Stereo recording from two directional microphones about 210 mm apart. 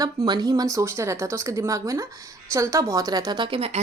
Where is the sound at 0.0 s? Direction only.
20° right (ahead or behind).